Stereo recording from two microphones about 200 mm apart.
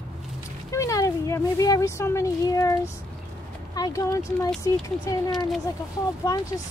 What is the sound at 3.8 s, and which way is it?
Speech, 15° left (ahead or behind).